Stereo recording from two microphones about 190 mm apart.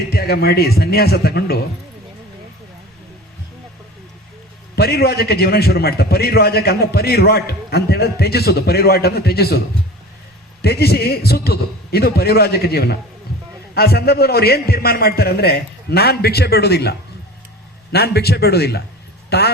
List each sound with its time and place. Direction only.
0.1 s a man's voice: 55° left (ahead or behind)
4.7 s a man's voice: 55° left (ahead or behind)
10.6 s a man's voice: 55° left (ahead or behind)
17.9 s a man's voice: 55° left (ahead or behind)